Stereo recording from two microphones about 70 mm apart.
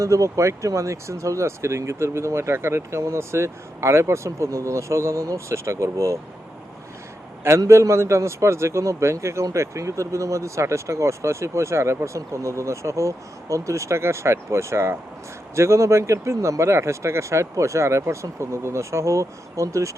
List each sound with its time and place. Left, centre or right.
0.0 s speech: right
7.6 s speech: right